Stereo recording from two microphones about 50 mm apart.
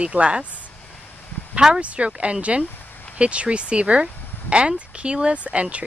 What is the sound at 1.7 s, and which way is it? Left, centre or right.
Speech, right.